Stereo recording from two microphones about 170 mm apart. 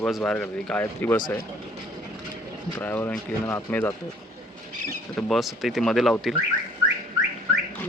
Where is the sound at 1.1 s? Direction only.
25° left (ahead or behind).